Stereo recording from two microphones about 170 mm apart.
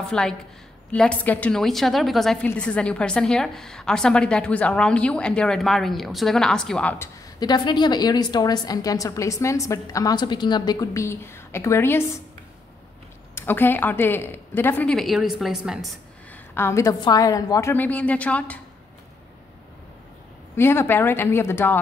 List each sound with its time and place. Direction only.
0.0 s a woman's voice: 5° left (ahead or behind)
7.3 s a woman's voice: 25° left (ahead or behind)
13.3 s speech: 15° left (ahead or behind); by 15.9 s centre (ahead or behind)
16.5 s speech: 15° left (ahead or behind)
20.5 s speech: 15° left (ahead or behind)